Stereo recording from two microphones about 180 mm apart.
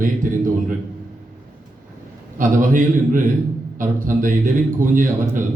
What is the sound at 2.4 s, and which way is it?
A man's voice, 50° right (ahead or behind).